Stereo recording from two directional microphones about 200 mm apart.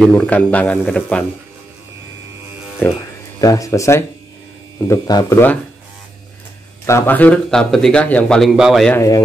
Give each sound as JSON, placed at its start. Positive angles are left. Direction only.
{"t": 0.0, "sound": "a man's voice", "side_deg": 5}
{"t": 2.8, "sound": "a man's voice", "side_deg": 10}
{"t": 6.9, "sound": "a man's voice", "side_deg": 10}